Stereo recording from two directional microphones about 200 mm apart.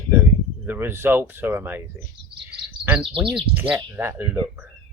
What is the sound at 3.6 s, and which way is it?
Speech, 10° right (ahead or behind).